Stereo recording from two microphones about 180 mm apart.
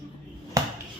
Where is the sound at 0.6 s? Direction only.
20° right (ahead or behind).